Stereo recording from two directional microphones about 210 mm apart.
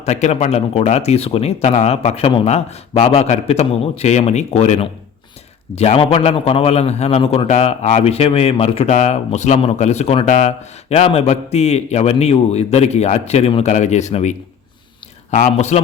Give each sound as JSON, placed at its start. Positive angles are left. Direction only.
{"t": 0.0, "sound": "a man's voice", "side_deg": 30}